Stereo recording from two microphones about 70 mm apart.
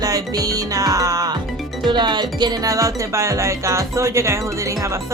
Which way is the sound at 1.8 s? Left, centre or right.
Right.